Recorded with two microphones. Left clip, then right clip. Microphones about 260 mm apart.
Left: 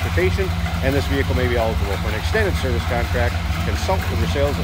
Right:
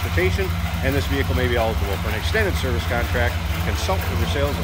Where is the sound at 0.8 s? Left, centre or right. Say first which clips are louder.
Left 2 dB; centre.